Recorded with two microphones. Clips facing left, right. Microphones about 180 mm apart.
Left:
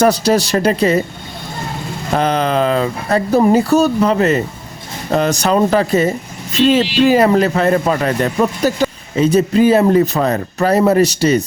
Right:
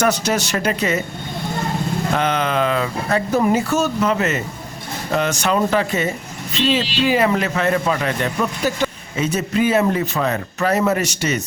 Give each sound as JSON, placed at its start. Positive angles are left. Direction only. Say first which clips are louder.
{"t": 0.0, "sound": "speech", "louder": "left 6 dB", "side_deg": 35}
{"t": 2.1, "sound": "speech", "louder": "left 6 dB", "side_deg": 35}